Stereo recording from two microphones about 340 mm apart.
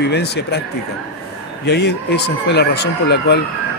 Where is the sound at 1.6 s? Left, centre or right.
Left.